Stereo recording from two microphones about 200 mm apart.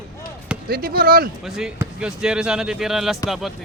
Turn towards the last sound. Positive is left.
turn(degrees=0)  # may be behind; listen again after turning